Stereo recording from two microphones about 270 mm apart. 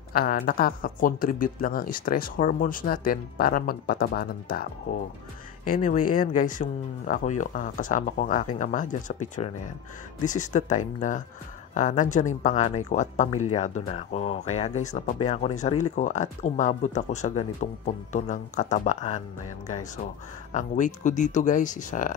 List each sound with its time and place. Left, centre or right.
0.1 s speech: left
20.5 s speech: left